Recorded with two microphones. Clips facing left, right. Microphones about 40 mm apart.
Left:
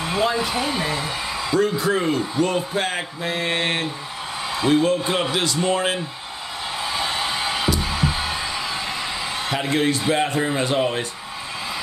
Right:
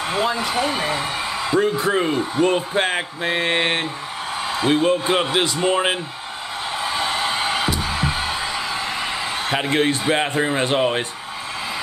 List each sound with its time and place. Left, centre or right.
0.2 s speech: centre
0.7 s a man's voice: centre
6.8 s a sound: centre
10.8 s a man's voice: right